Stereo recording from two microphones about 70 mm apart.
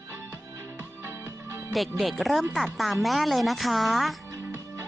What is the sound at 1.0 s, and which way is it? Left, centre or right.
Music, right.